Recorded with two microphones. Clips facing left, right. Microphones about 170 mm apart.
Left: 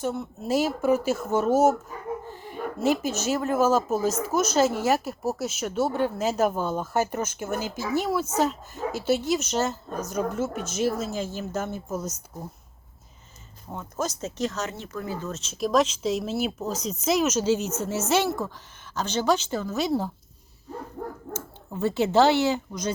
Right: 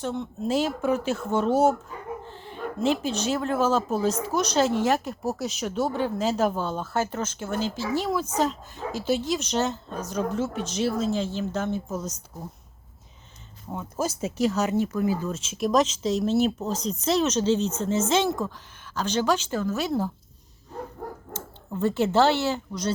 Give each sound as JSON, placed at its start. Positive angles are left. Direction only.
{"t": 0.0, "sound": "speech", "side_deg": 10}
{"t": 13.7, "sound": "speech", "side_deg": -5}
{"t": 16.7, "sound": "speech", "side_deg": -35}
{"t": 17.0, "sound": "speech", "side_deg": 10}
{"t": 18.9, "sound": "speech", "side_deg": -10}
{"t": 19.5, "sound": "speech", "side_deg": 15}
{"t": 21.7, "sound": "speech", "side_deg": 10}